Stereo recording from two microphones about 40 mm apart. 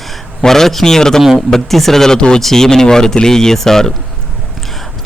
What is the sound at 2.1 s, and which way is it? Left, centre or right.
Speech, left.